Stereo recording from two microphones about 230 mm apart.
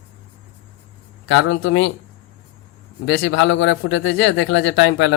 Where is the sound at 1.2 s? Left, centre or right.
Left.